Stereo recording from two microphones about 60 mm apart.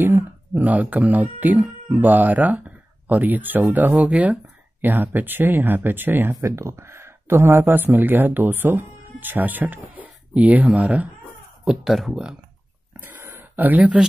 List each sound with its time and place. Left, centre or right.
0.0 s speech: right
4.8 s speech: right
6.4 s speech: right
11.6 s speech: centre
13.0 s a sound: right
13.7 s speech: right